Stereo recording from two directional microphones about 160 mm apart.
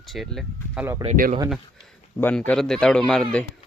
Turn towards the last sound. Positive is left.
turn(degrees=5)  # may be behind; listen again after turning